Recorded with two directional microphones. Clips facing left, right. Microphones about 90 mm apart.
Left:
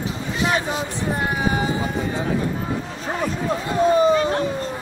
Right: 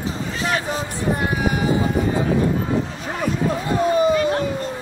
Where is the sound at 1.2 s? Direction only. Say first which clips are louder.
Left 2 dB; 25° left (ahead or behind).